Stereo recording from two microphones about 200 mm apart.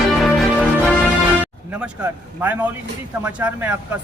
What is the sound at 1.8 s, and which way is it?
Speech, 10° right (ahead or behind).